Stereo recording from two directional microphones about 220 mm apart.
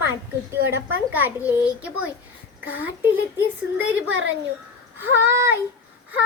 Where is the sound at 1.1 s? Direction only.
10° right (ahead or behind).